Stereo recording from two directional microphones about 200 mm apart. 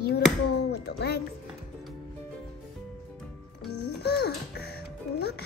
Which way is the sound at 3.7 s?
55° left (ahead or behind).